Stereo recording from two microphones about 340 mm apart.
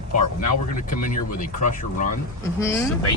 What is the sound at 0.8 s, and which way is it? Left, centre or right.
Speech, left.